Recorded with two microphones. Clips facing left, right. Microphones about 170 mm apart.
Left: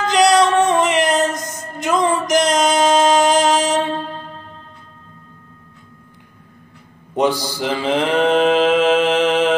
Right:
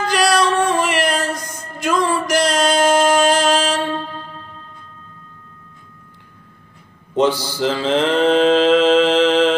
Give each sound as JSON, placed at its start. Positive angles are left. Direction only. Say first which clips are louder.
{"t": 0.0, "sound": "male singing", "louder": "left 3 dB", "side_deg": 20}
{"t": 7.2, "sound": "mantra", "louder": "right 1 dB", "side_deg": 15}